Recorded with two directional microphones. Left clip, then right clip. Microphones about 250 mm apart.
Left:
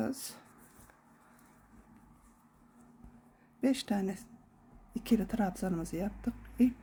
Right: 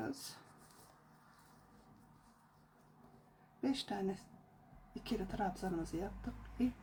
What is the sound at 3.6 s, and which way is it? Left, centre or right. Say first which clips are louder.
Speech: left 6 dB; left.